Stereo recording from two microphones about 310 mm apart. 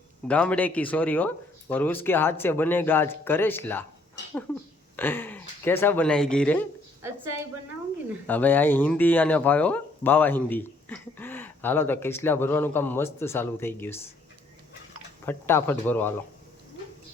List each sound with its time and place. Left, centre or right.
0.3 s speech: centre
4.9 s speech: centre
8.3 s speech: centre
15.3 s speech: centre